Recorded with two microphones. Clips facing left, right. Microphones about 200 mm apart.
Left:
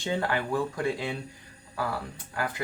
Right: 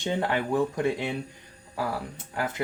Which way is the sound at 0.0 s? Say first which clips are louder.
Right 2 dB; 20° right (ahead or behind).